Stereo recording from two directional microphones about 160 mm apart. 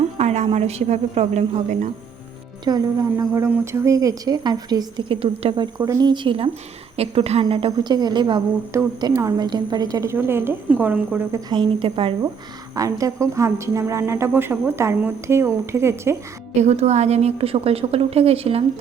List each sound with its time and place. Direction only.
0.0 s a woman's voice: 45° right (ahead or behind)
2.6 s a woman's voice: 25° right (ahead or behind)
11.3 s a woman's voice: 25° right (ahead or behind)
12.7 s a woman's voice: 20° right (ahead or behind)
16.6 s a woman's voice: 45° right (ahead or behind)